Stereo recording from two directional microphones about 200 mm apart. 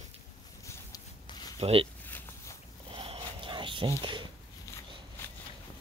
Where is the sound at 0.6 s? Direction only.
15° left (ahead or behind).